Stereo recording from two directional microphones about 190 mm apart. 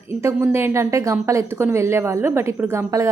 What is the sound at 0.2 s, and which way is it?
A woman's voice, 15° right (ahead or behind).